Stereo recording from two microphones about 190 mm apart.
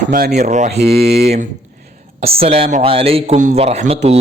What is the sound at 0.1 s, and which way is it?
Speech, 55° right (ahead or behind).